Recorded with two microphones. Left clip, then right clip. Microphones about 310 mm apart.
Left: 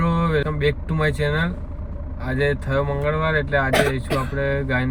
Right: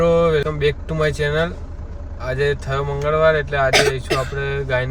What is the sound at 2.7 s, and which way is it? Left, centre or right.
Speech, right.